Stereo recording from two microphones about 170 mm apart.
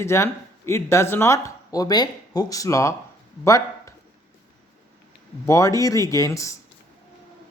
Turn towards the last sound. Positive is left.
turn(degrees=20)  # may be behind; listen again after turning